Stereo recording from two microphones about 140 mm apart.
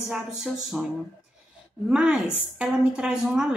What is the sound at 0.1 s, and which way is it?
Speech, 5° right (ahead or behind).